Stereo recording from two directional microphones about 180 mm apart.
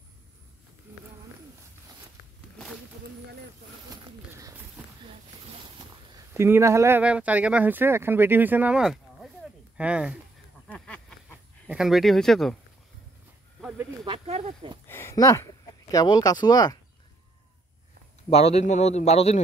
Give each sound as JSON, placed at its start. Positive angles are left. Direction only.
{"t": 6.1, "sound": "speech", "side_deg": -15}
{"t": 10.7, "sound": "a sound", "side_deg": 5}
{"t": 11.7, "sound": "speech", "side_deg": 0}
{"t": 13.6, "sound": "snake", "side_deg": -5}
{"t": 14.0, "sound": "speech", "side_deg": -35}
{"t": 14.9, "sound": "speech", "side_deg": 15}
{"t": 18.3, "sound": "a man's voice", "side_deg": 35}